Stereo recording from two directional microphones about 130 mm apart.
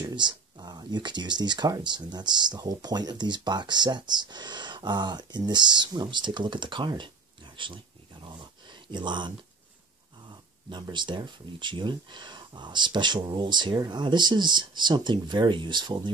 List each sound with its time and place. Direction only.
0.0 s speech: 35° right (ahead or behind)
10.7 s speech: 35° right (ahead or behind)